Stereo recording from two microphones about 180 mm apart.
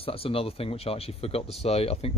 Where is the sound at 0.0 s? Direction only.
30° left (ahead or behind).